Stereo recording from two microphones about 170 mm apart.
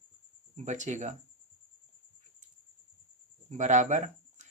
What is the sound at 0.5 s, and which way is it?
Speech, 45° right (ahead or behind).